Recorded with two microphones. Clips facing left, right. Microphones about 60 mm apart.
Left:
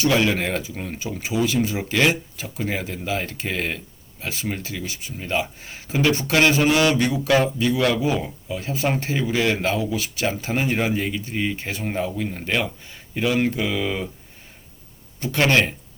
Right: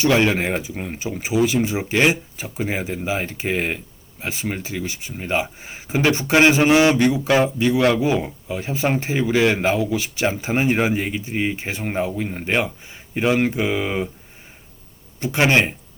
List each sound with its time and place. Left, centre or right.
0.0 s speech: right
15.2 s speech: right